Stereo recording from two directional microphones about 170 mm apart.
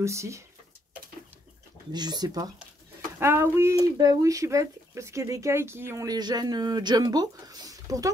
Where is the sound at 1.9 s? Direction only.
25° right (ahead or behind).